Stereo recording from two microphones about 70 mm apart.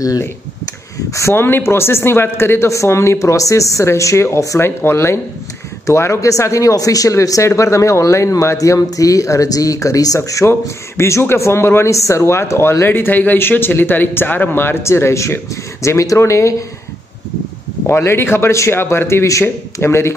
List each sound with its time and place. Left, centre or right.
1.1 s speech: left
17.8 s speech: left